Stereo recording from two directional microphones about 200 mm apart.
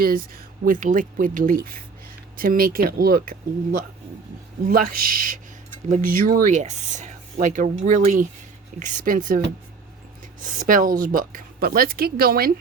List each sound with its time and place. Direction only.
0.0 s a woman's voice: 45° right (ahead or behind)
10.4 s a woman's voice: 40° right (ahead or behind)